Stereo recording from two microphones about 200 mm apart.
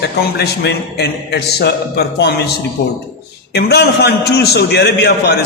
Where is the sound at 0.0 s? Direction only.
55° left (ahead or behind).